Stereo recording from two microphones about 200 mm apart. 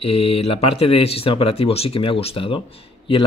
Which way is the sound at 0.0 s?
30° left (ahead or behind).